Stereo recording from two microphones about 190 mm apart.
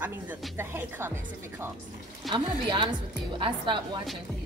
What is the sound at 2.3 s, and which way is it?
A woman's voice, 25° right (ahead or behind).